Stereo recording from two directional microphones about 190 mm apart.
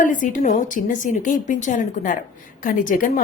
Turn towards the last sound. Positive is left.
turn(degrees=45)  # may be behind; listen again after turning